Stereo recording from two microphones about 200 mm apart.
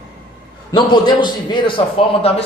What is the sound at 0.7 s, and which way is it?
Speech, 20° left (ahead or behind).